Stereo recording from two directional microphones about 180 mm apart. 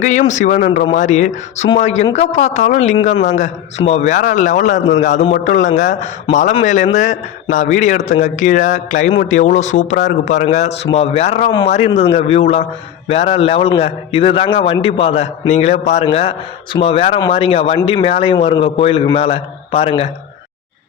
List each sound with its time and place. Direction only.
0.0 s a man's voice: 45° left (ahead or behind)